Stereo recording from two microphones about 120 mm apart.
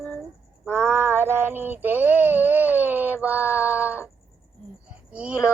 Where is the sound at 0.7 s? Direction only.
20° right (ahead or behind).